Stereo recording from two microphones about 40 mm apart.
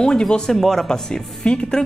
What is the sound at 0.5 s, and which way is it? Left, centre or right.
Speech, centre.